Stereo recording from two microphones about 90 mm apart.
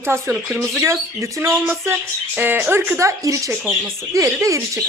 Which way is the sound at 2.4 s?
20° right (ahead or behind).